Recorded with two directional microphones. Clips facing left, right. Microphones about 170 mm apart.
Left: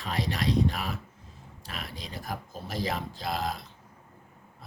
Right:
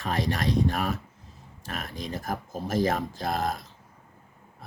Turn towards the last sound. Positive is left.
turn(degrees=-50)  # may be behind; listen again after turning